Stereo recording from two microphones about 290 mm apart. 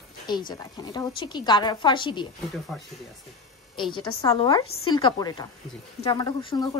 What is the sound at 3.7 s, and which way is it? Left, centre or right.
A woman's voice, centre.